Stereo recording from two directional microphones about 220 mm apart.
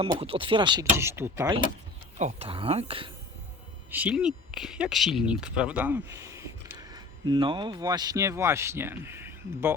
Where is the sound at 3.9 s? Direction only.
5° right (ahead or behind).